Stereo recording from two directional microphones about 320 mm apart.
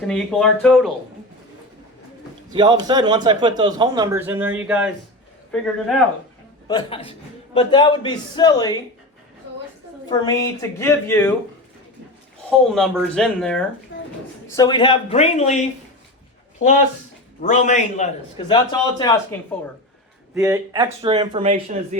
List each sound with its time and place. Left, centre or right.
0.0 s speech: centre
2.5 s a man's voice: centre
6.7 s a man's voice: centre
10.1 s a man's voice: centre
12.5 s speech: centre
13.9 s a sound: left
14.5 s a man's voice: centre
17.4 s a man's voice: left
20.3 s a man's voice: centre